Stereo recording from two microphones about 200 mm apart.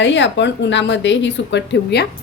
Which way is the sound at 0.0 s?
60° left (ahead or behind).